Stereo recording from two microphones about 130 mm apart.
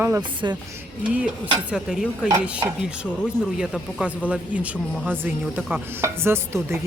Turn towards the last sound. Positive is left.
turn(degrees=-20)  # may be behind; listen again after turning